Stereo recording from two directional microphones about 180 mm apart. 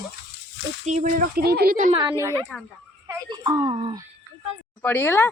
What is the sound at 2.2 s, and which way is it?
A woman's voice, 15° right (ahead or behind).